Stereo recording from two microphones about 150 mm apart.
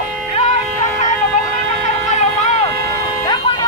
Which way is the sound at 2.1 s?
50° left (ahead or behind).